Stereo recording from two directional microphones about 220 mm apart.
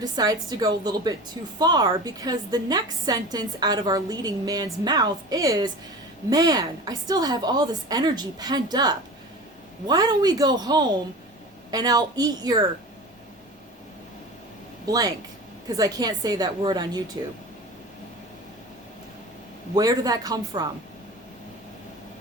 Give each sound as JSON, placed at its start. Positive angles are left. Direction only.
{"t": 0.0, "sound": "a woman's voice", "side_deg": -15}
{"t": 14.8, "sound": "a woman's voice", "side_deg": -15}
{"t": 19.7, "sound": "a woman's voice", "side_deg": -15}